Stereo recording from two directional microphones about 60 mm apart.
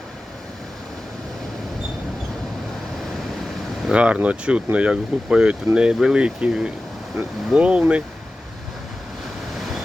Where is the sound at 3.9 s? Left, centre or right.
Centre.